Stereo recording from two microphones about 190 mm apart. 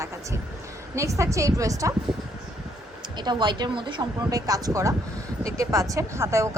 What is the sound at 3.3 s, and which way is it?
A woman's voice, 25° right (ahead or behind).